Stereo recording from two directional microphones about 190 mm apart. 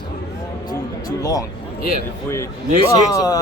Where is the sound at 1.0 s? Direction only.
20° left (ahead or behind).